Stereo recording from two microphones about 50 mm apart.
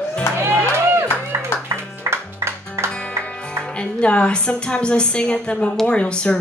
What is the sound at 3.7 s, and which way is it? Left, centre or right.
A woman's voice, left.